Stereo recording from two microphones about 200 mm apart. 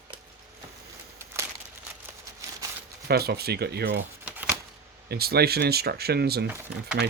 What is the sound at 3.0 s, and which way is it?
Speech, 50° right (ahead or behind).